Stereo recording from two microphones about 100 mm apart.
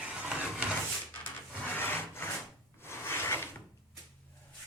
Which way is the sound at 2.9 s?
25° left (ahead or behind).